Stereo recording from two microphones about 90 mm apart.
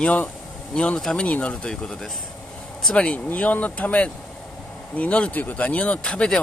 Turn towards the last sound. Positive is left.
turn(degrees=10)  # may be behind; listen again after turning